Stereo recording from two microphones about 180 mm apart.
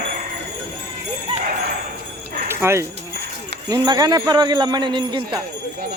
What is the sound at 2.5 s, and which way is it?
Dog, 15° right (ahead or behind).